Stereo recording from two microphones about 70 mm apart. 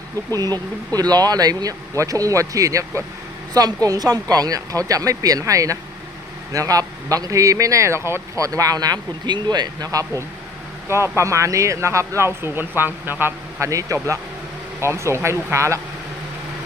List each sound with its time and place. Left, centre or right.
0.3 s speech: right
3.5 s speech: right
8.4 s speech: right
10.8 s speech: right
13.6 s speech: right